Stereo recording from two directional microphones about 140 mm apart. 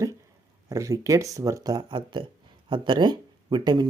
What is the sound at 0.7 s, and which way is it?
Speech, 25° right (ahead or behind).